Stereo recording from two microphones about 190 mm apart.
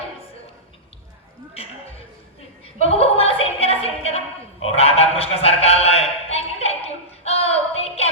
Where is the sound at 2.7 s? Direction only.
30° left (ahead or behind).